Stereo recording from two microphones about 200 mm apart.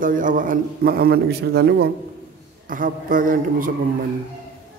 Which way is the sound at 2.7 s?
45° right (ahead or behind).